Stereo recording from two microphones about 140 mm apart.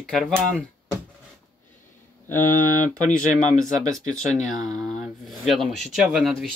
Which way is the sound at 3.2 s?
65° left (ahead or behind).